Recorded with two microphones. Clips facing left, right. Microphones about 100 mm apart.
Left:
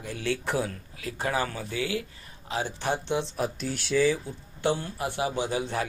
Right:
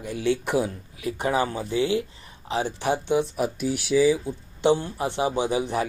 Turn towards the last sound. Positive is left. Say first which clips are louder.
# right 4 dB
turn(degrees=-15)  # may be behind; listen again after turning